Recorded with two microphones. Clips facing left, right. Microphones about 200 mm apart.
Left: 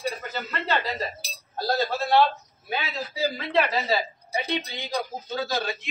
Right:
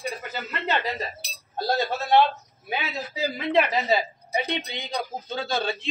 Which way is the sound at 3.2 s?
20° right (ahead or behind).